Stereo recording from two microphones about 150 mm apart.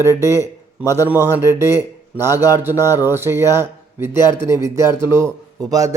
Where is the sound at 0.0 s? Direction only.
20° right (ahead or behind).